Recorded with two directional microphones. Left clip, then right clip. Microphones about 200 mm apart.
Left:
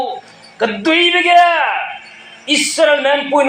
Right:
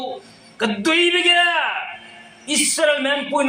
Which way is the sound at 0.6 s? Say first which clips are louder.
Left 5 dB; 30° right (ahead or behind).